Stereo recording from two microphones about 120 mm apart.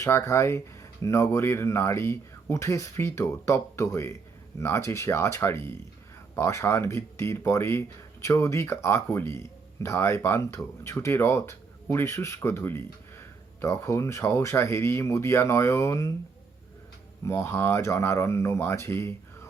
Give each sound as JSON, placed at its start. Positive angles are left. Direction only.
{"t": 0.0, "sound": "speech", "side_deg": 25}
{"t": 17.2, "sound": "speech", "side_deg": 20}